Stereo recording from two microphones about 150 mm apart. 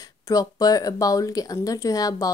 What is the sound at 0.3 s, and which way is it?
Speech, 25° left (ahead or behind).